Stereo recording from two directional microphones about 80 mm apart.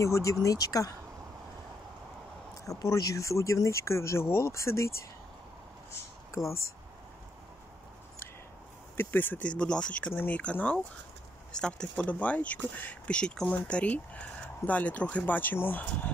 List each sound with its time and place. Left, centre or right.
0.0 s speech: left
2.6 s speech: left
5.9 s a sound: left
8.9 s speech: left
12.0 s speech: centre